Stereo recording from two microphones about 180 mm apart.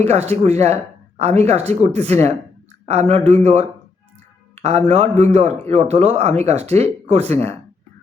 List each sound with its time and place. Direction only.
0.0 s speech: 35° right (ahead or behind)
4.5 s a sound: 35° right (ahead or behind)
5.2 s speech: 35° right (ahead or behind)